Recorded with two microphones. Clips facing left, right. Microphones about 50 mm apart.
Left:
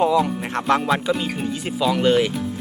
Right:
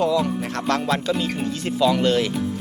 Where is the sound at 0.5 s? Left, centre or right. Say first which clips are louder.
Left 5 dB; centre.